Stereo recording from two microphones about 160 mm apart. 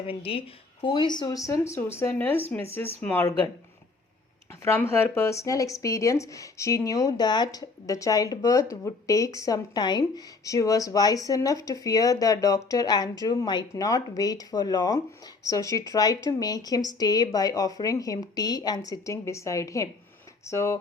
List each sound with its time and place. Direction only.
0.1 s speech: 35° left (ahead or behind); by 3.3 s 10° left (ahead or behind)
4.6 s speech: 15° left (ahead or behind)